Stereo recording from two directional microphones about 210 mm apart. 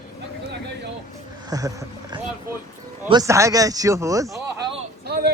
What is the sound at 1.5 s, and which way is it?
Speech, 15° right (ahead or behind).